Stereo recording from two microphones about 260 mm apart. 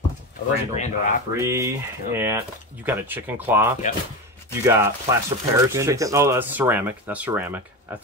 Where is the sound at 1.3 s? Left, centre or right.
Centre.